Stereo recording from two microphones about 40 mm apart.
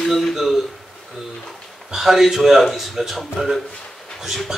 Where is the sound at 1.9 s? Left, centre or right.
Centre.